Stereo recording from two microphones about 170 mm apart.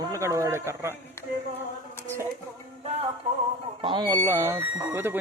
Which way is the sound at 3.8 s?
25° right (ahead or behind).